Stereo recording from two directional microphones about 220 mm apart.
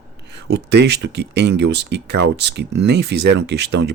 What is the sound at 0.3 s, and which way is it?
Speech, 50° right (ahead or behind).